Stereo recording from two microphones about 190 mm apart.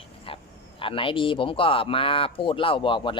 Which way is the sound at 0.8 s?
25° left (ahead or behind).